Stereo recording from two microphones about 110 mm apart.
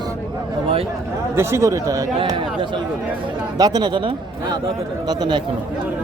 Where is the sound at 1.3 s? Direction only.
25° right (ahead or behind).